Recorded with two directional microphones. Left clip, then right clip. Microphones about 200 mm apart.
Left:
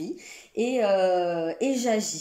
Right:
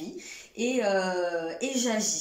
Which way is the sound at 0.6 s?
40° left (ahead or behind).